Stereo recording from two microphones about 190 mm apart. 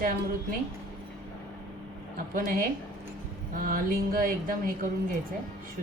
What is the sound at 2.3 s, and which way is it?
Music, 45° right (ahead or behind).